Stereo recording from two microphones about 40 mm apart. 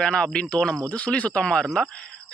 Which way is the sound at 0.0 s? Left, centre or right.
Left.